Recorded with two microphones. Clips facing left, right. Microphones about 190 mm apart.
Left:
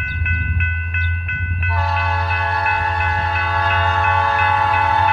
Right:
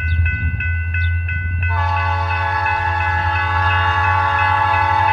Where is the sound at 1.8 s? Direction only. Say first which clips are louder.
Even; centre (ahead or behind).